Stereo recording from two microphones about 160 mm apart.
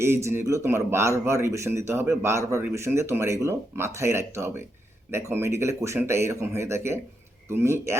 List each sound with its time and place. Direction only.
0.0 s a man's voice: 15° right (ahead or behind)